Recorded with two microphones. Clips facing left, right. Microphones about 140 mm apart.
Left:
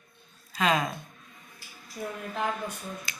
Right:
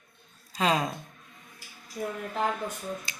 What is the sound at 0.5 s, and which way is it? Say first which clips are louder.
Speech: even; 30° right (ahead or behind).